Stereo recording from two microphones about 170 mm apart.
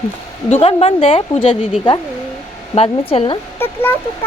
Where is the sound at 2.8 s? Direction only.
35° left (ahead or behind).